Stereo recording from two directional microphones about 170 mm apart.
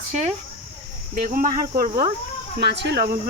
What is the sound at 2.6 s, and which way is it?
Speech, 80° right.